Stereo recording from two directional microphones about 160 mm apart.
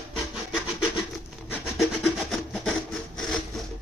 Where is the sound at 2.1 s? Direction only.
Centre (ahead or behind).